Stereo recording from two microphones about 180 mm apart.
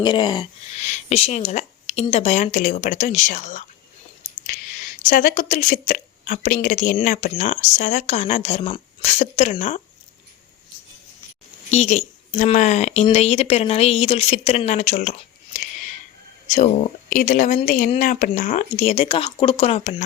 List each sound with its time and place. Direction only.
0.0 s speech: 25° left (ahead or behind)
0.8 s speech: 40° left (ahead or behind)
5.0 s speech: 45° left (ahead or behind)
11.7 s speech: 40° left (ahead or behind)
16.5 s speech: 40° left (ahead or behind)